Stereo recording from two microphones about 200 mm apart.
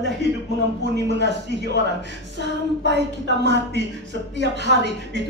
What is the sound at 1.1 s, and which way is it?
Speech, 60° right (ahead or behind).